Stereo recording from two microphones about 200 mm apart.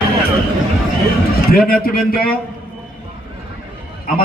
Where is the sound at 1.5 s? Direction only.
45° left (ahead or behind).